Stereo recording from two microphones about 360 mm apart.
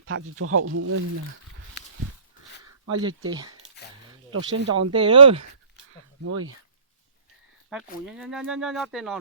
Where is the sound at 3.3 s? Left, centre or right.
Centre.